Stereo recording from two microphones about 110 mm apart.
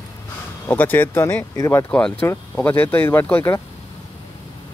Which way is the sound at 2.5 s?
20° left (ahead or behind).